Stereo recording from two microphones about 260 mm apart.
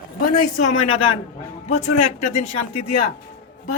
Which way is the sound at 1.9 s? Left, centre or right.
Left.